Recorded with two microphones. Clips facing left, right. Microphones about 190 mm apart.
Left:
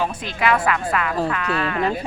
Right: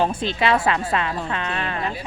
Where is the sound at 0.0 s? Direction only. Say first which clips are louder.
Right 2 dB; 30° right (ahead or behind).